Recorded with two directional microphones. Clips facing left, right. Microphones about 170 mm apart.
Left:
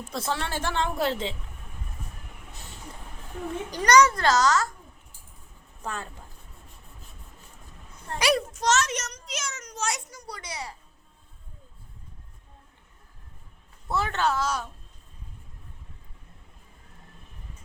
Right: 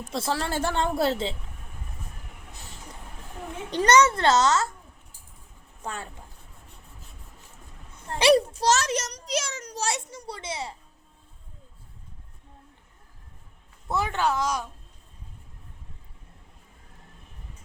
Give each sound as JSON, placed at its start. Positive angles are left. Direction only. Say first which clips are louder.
{"t": 0.1, "sound": "a woman's voice", "louder": "right 3 dB", "side_deg": -30}
{"t": 3.7, "sound": "a child's voice", "louder": "even", "side_deg": -25}
{"t": 5.8, "sound": "speech", "louder": "even", "side_deg": -15}
{"t": 8.1, "sound": "a child's voice", "louder": "right 6 dB", "side_deg": -30}
{"t": 13.8, "sound": "speech", "louder": "right 1 dB", "side_deg": -15}